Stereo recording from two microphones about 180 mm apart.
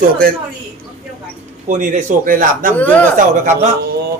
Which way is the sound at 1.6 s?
45° right (ahead or behind).